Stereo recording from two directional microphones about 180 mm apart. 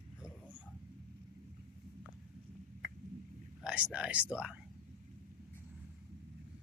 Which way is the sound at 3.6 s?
5° right (ahead or behind).